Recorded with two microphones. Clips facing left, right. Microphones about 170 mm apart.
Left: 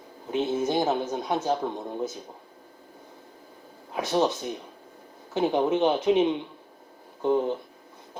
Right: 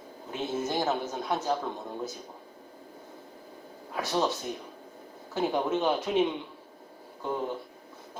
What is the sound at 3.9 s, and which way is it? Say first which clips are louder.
Speech: left 4 dB; 20° left (ahead or behind).